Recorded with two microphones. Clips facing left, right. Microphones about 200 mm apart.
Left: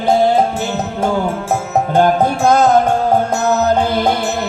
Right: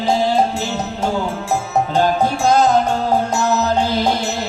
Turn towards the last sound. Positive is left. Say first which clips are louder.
# left 3 dB
turn(degrees=55)  # may be behind; listen again after turning